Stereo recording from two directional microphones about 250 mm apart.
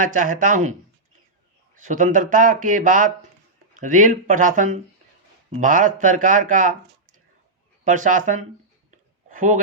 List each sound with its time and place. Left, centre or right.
0.0 s speech: right
1.7 s speech: right
7.9 s speech: right